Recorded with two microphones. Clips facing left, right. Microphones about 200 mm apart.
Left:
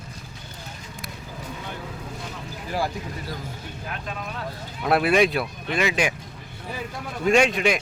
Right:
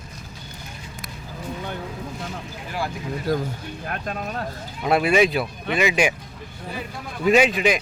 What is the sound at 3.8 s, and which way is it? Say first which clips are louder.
Speech: right 5 dB; 50° right (ahead or behind).